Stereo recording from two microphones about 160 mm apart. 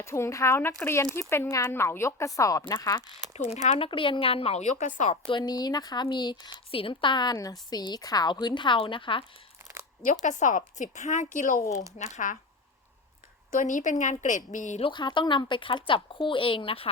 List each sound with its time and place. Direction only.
0.0 s a woman's voice: 15° left (ahead or behind)
3.3 s a woman's voice: 45° left (ahead or behind)
3.8 s speech: 30° left (ahead or behind); by 5.1 s 50° left (ahead or behind)
5.2 s a woman's voice: 30° left (ahead or behind)
10.0 s a woman's voice: 50° left (ahead or behind)
13.5 s a woman's voice: 55° left (ahead or behind)
14.8 s speech: 30° left (ahead or behind)